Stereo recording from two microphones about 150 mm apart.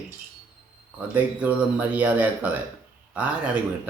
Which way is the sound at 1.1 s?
10° right (ahead or behind).